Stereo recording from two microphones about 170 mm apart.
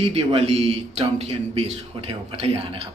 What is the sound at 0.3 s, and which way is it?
A man's voice, 35° right (ahead or behind).